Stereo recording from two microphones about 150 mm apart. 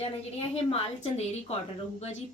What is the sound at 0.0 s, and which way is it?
A woman's voice, 45° left (ahead or behind).